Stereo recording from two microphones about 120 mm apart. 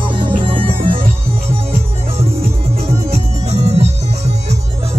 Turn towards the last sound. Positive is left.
turn(degrees=-60)  # may be behind; listen again after turning